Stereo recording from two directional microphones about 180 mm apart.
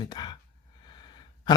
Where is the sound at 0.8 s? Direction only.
25° left (ahead or behind).